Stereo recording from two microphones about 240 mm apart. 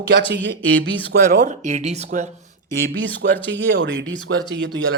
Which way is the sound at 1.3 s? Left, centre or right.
Right.